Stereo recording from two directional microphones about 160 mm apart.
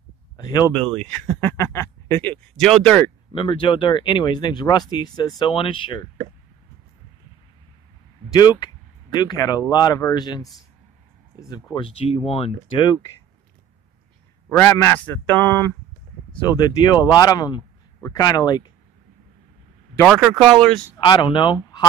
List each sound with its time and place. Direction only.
0.4 s speech: 25° left (ahead or behind)
0.8 s speech: 5° left (ahead or behind)
1.6 s speech: 15° left (ahead or behind)
3.3 s speech: 30° left (ahead or behind)
8.3 s speech: 25° left (ahead or behind)
14.5 s a man's voice: 15° left (ahead or behind)
16.4 s speech: 25° left (ahead or behind)
21.0 s speech: 30° left (ahead or behind)